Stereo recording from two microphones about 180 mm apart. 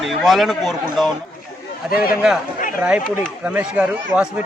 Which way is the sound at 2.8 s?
5° right (ahead or behind).